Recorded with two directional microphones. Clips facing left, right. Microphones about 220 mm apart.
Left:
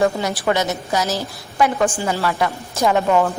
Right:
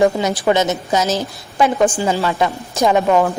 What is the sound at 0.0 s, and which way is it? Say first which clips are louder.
A woman's voice: right 4 dB; 20° right (ahead or behind).